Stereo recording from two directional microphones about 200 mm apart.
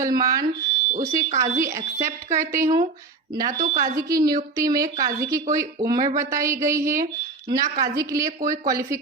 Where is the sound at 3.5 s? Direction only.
40° right (ahead or behind).